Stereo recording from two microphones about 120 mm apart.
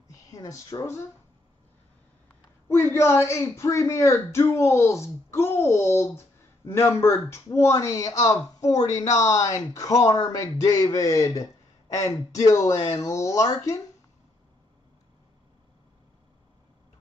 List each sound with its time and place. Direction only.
0.1 s speech: 25° left (ahead or behind)
2.7 s a man's voice: 20° left (ahead or behind)